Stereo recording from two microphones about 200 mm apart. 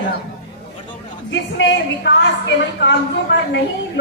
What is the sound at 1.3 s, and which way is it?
A woman's voice, 65° left (ahead or behind).